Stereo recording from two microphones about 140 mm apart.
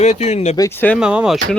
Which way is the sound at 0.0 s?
50° left (ahead or behind).